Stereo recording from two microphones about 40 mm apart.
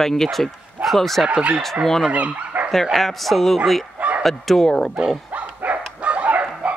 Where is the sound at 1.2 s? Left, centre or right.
Right.